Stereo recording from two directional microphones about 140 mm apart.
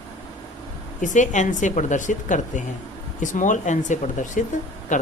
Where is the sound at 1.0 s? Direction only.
60° left (ahead or behind).